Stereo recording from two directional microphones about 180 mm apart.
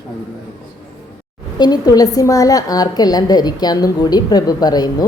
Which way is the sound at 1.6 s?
20° left (ahead or behind).